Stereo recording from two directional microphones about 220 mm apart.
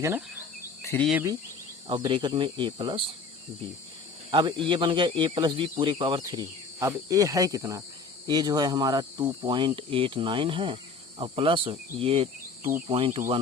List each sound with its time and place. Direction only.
0.8 s cricket: 10° left (ahead or behind)
1.9 s speech: 20° right (ahead or behind)
4.3 s speech: 20° right (ahead or behind)